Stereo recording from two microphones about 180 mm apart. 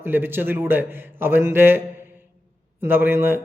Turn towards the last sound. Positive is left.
turn(degrees=-10)  # may be behind; listen again after turning